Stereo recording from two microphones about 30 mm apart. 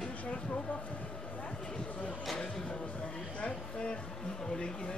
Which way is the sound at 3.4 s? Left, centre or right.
Left.